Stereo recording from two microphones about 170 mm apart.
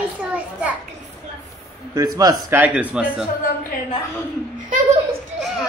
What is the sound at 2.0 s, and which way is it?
Speech, 20° right (ahead or behind).